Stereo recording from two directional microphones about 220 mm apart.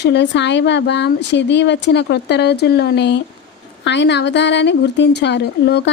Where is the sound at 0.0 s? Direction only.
50° left (ahead or behind).